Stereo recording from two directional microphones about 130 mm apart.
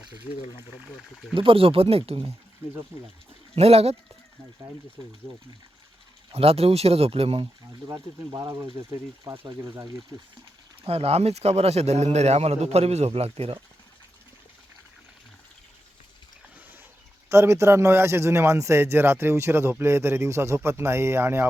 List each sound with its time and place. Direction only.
1.3 s a man's voice: 40° right (ahead or behind)
3.5 s a man's voice: 50° right (ahead or behind)
6.3 s a man's voice: 50° right (ahead or behind)
7.9 s speech: 25° right (ahead or behind)
10.8 s a man's voice: 50° right (ahead or behind)
16.6 s a sound: 15° right (ahead or behind)
17.2 s speech: 20° right (ahead or behind)